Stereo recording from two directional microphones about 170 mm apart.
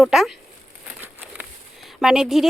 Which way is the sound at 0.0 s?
Centre (ahead or behind).